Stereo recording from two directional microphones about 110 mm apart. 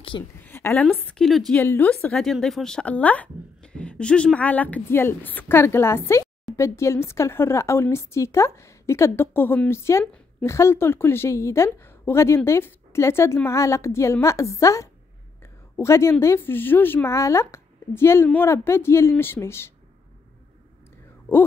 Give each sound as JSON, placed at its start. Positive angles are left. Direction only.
{"t": 0.1, "sound": "a woman's voice", "side_deg": 40}
{"t": 0.5, "sound": "a sound", "side_deg": 20}
{"t": 0.8, "sound": "a woman's voice", "side_deg": 10}
{"t": 1.6, "sound": "a woman's voice", "side_deg": 15}